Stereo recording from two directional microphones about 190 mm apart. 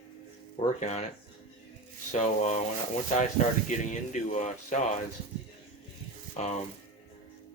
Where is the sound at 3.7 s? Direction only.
40° left (ahead or behind).